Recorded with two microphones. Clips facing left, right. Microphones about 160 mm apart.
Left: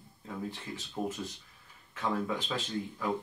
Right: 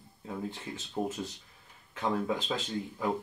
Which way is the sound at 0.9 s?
25° right (ahead or behind).